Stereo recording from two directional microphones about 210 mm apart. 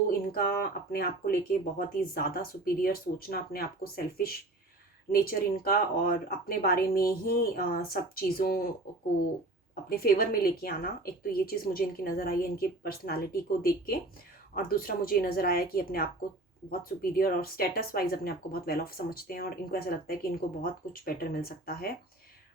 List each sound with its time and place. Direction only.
0.1 s speech: 45° left (ahead or behind)
9.9 s speech: 45° left (ahead or behind)